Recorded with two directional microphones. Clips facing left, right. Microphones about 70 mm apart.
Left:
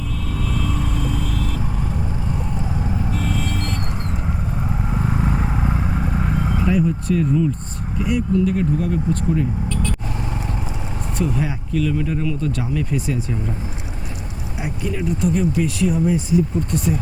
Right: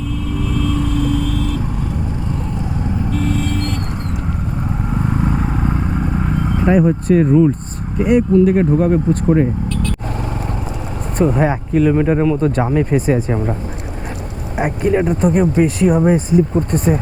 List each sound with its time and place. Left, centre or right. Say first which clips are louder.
0.4 s vehicle: right 6 dB; centre
3.1 s vehicle: right 5 dB; centre
4.9 s vehicle: right 4 dB; centre
6.6 s speech: right 7 dB; right
11.2 s speech: right 9 dB; right